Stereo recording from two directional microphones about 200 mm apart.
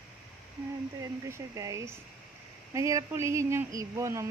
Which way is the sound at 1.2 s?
15° right (ahead or behind).